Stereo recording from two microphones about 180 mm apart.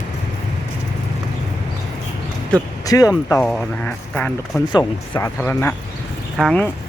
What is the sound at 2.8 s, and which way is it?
Speech, 20° left (ahead or behind).